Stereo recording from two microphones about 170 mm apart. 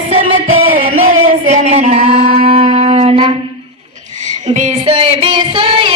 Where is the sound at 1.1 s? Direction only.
40° right (ahead or behind).